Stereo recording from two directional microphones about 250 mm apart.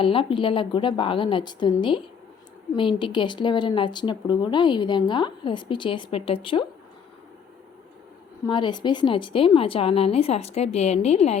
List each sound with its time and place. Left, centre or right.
0.0 s speech: left
8.4 s speech: centre